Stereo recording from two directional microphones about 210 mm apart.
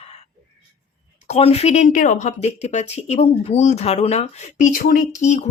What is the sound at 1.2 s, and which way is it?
Speech, 30° left (ahead or behind).